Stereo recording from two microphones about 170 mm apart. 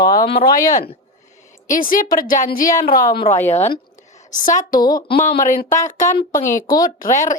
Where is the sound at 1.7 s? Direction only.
55° left (ahead or behind).